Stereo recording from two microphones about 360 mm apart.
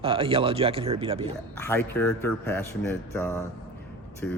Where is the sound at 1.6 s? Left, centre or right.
Centre.